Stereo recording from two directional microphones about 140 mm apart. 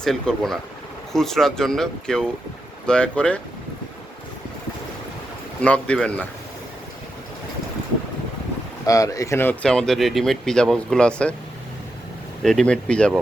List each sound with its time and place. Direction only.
0.0 s speech: centre (ahead or behind)
5.6 s speech: 5° left (ahead or behind)
8.9 s speech: 25° left (ahead or behind)
9.6 s speech: 5° left (ahead or behind)
12.4 s speech: 5° left (ahead or behind)